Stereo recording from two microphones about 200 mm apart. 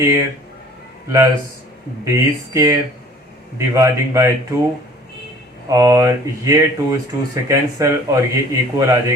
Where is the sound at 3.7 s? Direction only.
15° right (ahead or behind).